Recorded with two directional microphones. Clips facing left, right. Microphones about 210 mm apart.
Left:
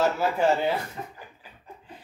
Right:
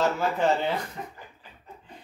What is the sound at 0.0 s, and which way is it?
Speech, 10° left (ahead or behind).